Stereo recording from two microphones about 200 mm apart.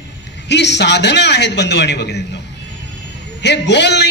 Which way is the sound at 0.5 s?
60° left (ahead or behind).